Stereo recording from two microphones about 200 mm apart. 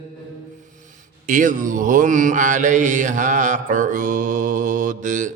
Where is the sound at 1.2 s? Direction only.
40° right (ahead or behind).